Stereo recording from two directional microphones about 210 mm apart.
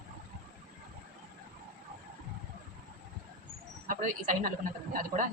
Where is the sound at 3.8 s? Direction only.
40° right (ahead or behind).